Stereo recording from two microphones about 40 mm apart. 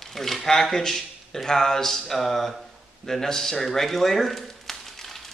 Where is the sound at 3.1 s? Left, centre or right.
Centre.